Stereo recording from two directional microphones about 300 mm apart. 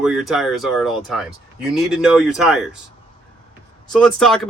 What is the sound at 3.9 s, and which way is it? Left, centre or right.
Speech, centre.